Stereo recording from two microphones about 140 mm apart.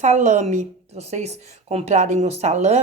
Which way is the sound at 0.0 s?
55° right (ahead or behind).